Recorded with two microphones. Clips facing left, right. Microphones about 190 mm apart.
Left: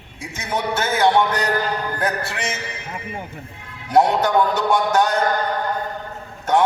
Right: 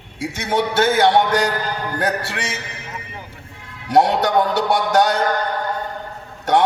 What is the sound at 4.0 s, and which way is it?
A man's voice, 75° right (ahead or behind).